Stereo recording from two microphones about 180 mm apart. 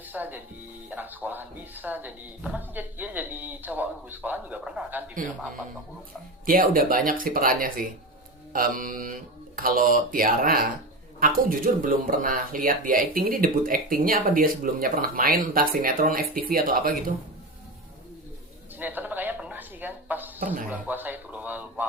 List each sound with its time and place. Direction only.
0.0 s speech: 10° right (ahead or behind)
6.4 s speech: 50° right (ahead or behind)
18.8 s a sound: 10° right (ahead or behind)
20.7 s speech: 10° right (ahead or behind)